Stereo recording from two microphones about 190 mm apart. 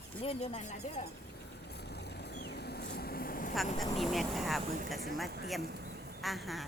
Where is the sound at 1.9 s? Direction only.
60° left (ahead or behind).